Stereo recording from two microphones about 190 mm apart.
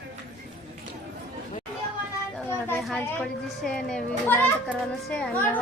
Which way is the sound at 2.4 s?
10° left (ahead or behind).